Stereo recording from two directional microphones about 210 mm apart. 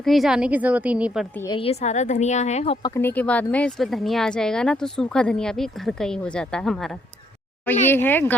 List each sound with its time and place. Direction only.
0.0 s speech: centre (ahead or behind)
1.5 s a woman's voice: 25° left (ahead or behind)
2.8 s speech: 10° left (ahead or behind)